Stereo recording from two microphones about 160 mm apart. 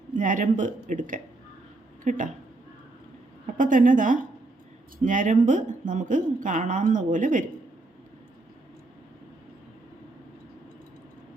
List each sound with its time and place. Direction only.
0.1 s speech: 55° right (ahead or behind)
3.4 s a woman's voice: 55° right (ahead or behind)